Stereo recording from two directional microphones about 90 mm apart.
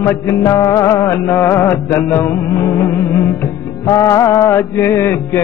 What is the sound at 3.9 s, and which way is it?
Music, 35° left (ahead or behind).